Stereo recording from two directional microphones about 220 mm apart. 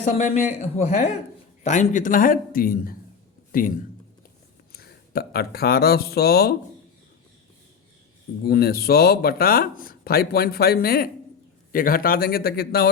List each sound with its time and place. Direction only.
0.0 s speech: 35° left (ahead or behind)
4.7 s speech: 45° left (ahead or behind)
8.4 s speech: 45° left (ahead or behind)